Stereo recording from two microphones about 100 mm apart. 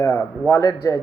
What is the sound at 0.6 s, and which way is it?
Speech, 35° left (ahead or behind).